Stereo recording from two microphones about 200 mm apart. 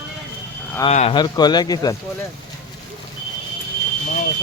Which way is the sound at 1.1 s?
20° left (ahead or behind).